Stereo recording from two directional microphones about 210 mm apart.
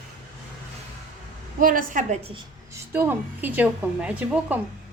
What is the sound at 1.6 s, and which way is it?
Speech, 40° right (ahead or behind).